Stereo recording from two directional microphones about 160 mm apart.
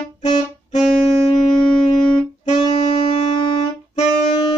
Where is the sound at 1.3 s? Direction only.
35° left (ahead or behind).